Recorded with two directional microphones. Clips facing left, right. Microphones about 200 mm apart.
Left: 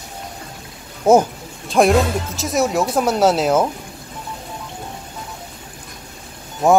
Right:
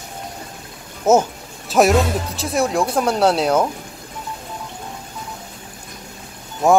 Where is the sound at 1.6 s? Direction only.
5° right (ahead or behind).